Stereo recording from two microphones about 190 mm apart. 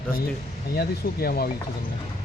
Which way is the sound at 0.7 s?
55° left (ahead or behind).